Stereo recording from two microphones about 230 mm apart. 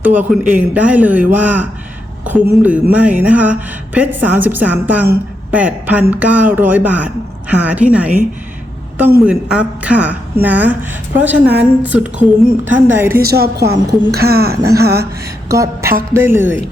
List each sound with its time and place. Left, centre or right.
0.0 s a woman's voice: centre
9.2 s a woman's voice: centre
13.2 s a woman's voice: right
14.5 s a woman's voice: centre
14.8 s a woman's voice: right
15.4 s a woman's voice: centre